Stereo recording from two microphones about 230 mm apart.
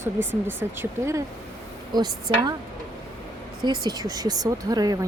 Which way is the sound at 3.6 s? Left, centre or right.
Centre.